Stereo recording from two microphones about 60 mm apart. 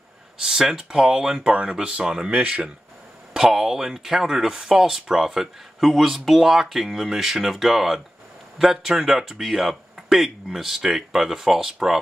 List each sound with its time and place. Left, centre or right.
0.4 s speech: centre